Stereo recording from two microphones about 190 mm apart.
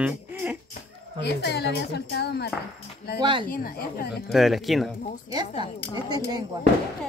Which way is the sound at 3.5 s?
50° left (ahead or behind).